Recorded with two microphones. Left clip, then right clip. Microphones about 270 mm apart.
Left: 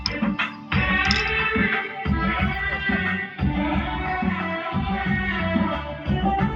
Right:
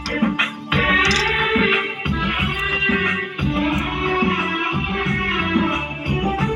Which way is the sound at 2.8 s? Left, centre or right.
Centre.